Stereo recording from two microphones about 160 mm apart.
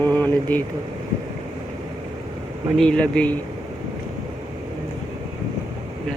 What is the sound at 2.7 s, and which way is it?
Speech, 5° left (ahead or behind).